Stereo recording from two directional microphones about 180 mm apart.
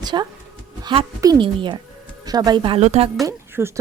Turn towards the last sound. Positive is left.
turn(degrees=-15)  # may be behind; listen again after turning